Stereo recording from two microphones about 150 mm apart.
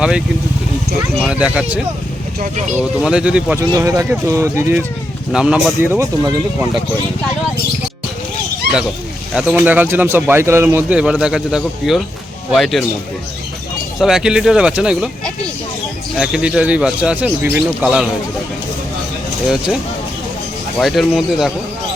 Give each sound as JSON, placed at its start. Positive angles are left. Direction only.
{"t": 1.2, "sound": "speech", "side_deg": -5}
{"t": 2.4, "sound": "speech", "side_deg": -50}
{"t": 2.7, "sound": "speech", "side_deg": -5}
{"t": 3.6, "sound": "speech", "side_deg": -20}
{"t": 5.3, "sound": "speech", "side_deg": -5}
{"t": 5.8, "sound": "speech", "side_deg": -15}
{"t": 8.7, "sound": "a sound", "side_deg": -90}
{"t": 9.3, "sound": "speech", "side_deg": -5}
{"t": 14.0, "sound": "speech", "side_deg": -5}
{"t": 16.1, "sound": "speech", "side_deg": -5}
{"t": 20.7, "sound": "speech", "side_deg": 0}